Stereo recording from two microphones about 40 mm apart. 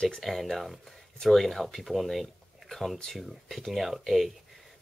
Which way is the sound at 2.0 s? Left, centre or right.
Centre.